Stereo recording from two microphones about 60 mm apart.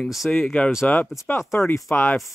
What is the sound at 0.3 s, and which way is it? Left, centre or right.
Speech, centre.